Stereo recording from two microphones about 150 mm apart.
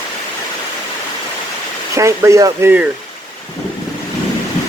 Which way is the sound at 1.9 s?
20° right (ahead or behind).